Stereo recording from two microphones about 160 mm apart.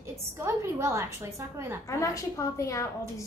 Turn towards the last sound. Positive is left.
turn(degrees=20)  # may be behind; listen again after turning